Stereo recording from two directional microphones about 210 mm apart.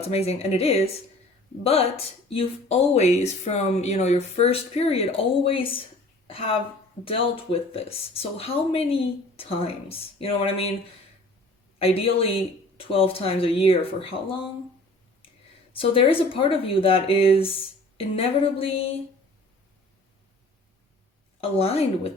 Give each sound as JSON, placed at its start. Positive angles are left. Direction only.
{"t": 0.0, "sound": "speech", "side_deg": 30}
{"t": 11.8, "sound": "speech", "side_deg": 25}
{"t": 15.7, "sound": "speech", "side_deg": 25}
{"t": 21.4, "sound": "speech", "side_deg": 30}